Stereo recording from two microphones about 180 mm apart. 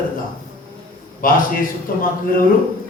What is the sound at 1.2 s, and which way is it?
Speech, 50° left (ahead or behind).